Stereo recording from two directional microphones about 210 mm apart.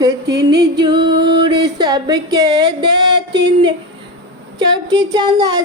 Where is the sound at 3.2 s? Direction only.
55° right (ahead or behind).